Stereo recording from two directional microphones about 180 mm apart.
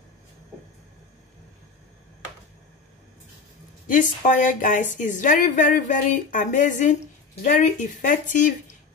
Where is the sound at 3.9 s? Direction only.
45° left (ahead or behind).